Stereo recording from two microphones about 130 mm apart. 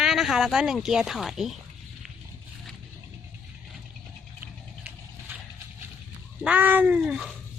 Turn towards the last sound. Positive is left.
turn(degrees=-5)  # may be behind; listen again after turning